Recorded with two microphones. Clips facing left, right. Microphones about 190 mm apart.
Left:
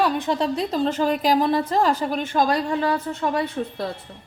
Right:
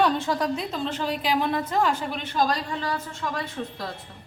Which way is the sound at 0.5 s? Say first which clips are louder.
Left 7 dB; 40° left (ahead or behind).